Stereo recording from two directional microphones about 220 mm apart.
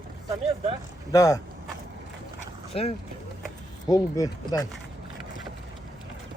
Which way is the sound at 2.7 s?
25° left (ahead or behind).